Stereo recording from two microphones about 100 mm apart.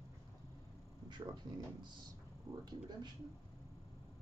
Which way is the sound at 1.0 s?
50° right (ahead or behind).